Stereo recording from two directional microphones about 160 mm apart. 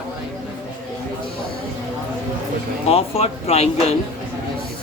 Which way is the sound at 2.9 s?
40° left (ahead or behind).